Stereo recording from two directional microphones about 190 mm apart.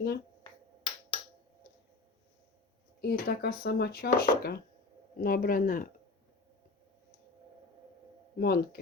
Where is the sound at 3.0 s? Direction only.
55° left (ahead or behind).